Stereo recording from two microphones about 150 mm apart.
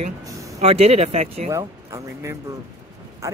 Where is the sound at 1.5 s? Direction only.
20° right (ahead or behind).